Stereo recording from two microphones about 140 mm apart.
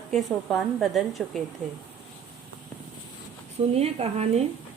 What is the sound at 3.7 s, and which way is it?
Speech, 50° right (ahead or behind).